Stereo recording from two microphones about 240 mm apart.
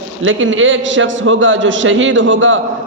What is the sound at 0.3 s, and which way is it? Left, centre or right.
A man's voice, right.